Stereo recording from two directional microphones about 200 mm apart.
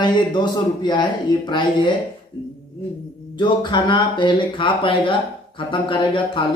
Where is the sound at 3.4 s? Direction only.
20° left (ahead or behind).